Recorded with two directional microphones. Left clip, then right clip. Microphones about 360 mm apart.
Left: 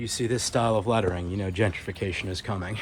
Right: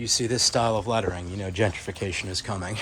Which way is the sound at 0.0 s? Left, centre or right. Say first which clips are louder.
Right 5 dB; centre.